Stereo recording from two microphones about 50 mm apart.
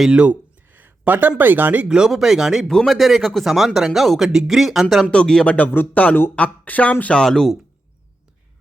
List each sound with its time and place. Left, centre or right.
0.1 s a sound: right
1.4 s speech: right
1.9 s speech: centre
2.6 s speech: centre
5.0 s speech: centre
5.5 s a sound: left
5.7 s a man's voice: left
6.3 s speech: left
7.1 s speech: centre